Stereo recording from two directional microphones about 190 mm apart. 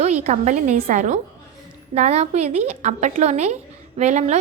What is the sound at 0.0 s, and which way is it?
A woman's voice, 35° right (ahead or behind).